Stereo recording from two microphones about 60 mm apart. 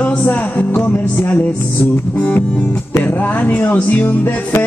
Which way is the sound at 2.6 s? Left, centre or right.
Left.